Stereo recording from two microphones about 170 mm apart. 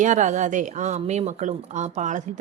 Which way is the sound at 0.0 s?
45° right (ahead or behind).